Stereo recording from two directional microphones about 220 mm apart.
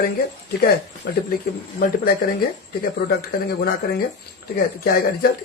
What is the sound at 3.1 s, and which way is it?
Speech, 45° left (ahead or behind).